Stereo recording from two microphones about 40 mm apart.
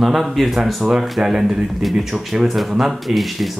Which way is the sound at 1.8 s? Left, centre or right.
Centre.